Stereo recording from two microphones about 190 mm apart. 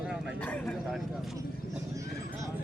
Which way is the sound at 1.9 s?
15° right (ahead or behind).